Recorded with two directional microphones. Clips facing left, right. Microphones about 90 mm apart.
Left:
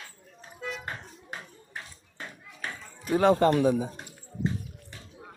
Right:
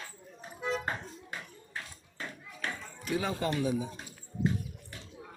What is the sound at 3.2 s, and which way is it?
Speech, 60° left (ahead or behind).